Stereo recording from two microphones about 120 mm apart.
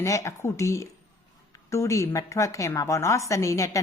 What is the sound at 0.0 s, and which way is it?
A woman's voice, 25° left (ahead or behind).